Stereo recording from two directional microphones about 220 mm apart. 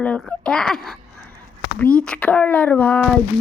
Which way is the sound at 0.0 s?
5° left (ahead or behind).